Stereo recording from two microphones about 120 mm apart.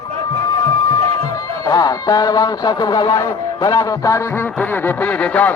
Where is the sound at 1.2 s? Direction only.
30° left (ahead or behind).